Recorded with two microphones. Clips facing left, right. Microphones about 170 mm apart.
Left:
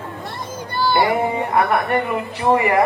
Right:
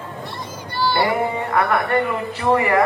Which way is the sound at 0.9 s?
20° left (ahead or behind).